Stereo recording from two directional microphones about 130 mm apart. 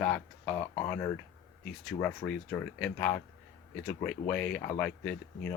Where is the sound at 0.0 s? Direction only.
10° left (ahead or behind).